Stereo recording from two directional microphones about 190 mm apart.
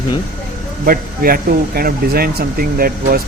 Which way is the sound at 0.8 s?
50° right (ahead or behind).